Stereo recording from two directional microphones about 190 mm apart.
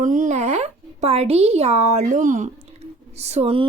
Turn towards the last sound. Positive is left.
turn(degrees=-30)  # may be behind; listen again after turning